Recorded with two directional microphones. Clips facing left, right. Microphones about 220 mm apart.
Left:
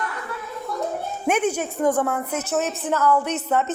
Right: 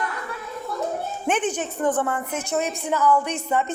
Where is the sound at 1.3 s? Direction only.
10° left (ahead or behind).